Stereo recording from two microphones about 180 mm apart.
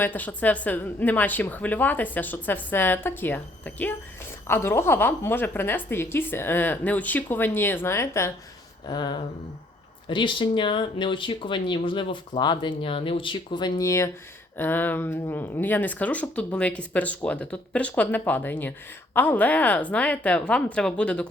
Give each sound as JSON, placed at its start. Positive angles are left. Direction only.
{"t": 0.0, "sound": "speech", "side_deg": 10}